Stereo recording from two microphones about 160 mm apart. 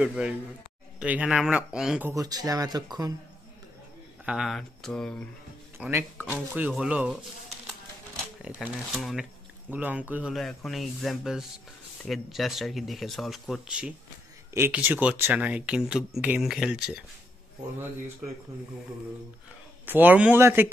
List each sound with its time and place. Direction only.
0.0 s speech: 5° right (ahead or behind)
2.0 s speech: 20° right (ahead or behind)
4.3 s speech: centre (ahead or behind)
5.8 s speech: 15° right (ahead or behind)
8.4 s speech: 5° right (ahead or behind)
17.7 s speech: 15° right (ahead or behind)
19.9 s speech: 10° right (ahead or behind)